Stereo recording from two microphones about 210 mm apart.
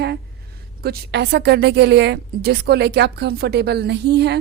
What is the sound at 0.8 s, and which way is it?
Speech, 50° right (ahead or behind).